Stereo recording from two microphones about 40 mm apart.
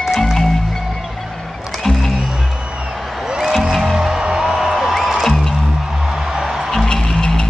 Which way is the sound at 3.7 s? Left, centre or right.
Centre.